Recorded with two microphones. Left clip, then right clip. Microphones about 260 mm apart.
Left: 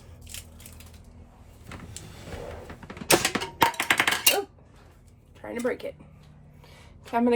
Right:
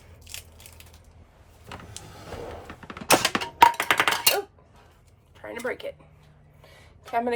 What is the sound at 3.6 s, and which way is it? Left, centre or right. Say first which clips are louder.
Music: right 4 dB; centre.